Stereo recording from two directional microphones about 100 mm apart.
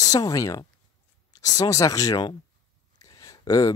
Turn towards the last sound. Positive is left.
turn(degrees=35)  # may be behind; listen again after turning